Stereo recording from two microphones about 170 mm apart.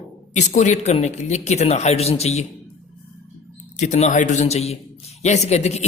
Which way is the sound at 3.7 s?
45° left (ahead or behind).